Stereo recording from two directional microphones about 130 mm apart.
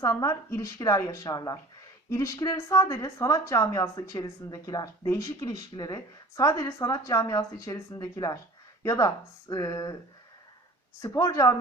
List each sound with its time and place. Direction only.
0.0 s speech: 25° left (ahead or behind)
11.0 s speech: 25° left (ahead or behind)